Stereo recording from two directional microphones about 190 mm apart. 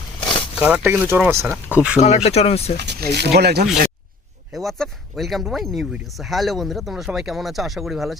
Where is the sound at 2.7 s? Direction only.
60° right (ahead or behind).